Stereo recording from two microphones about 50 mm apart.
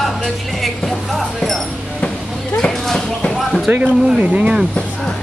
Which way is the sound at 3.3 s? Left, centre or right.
Centre.